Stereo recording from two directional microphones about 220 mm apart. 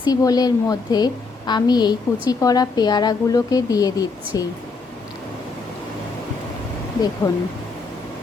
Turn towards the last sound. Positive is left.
turn(degrees=20)  # may be behind; listen again after turning